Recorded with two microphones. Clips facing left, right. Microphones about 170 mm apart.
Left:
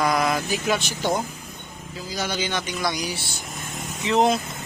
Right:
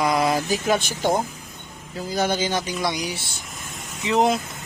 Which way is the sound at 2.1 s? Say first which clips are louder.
Right 5 dB; 50° right (ahead or behind).